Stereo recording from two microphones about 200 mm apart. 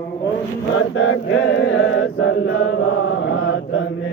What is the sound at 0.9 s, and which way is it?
Chant, 80° left.